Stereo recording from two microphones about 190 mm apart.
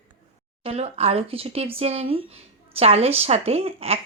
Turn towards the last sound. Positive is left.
turn(degrees=-30)  # may be behind; listen again after turning